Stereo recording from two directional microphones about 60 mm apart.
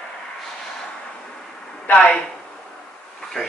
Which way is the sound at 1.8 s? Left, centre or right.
Centre.